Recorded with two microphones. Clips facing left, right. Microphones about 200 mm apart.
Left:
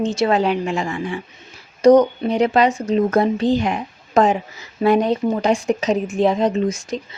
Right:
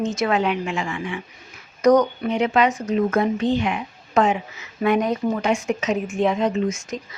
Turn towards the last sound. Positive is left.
turn(degrees=30)  # may be behind; listen again after turning